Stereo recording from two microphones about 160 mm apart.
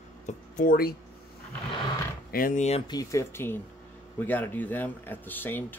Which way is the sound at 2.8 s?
20° left (ahead or behind).